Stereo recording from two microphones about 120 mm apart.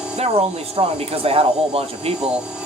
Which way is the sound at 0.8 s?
55° right (ahead or behind).